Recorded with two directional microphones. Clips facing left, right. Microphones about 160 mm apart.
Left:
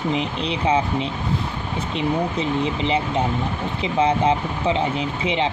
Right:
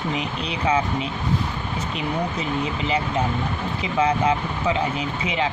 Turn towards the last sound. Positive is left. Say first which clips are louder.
# left 2 dB
turn(degrees=25)  # may be behind; listen again after turning